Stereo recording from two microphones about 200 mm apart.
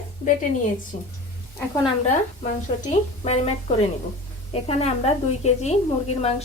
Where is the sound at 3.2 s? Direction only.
35° left (ahead or behind).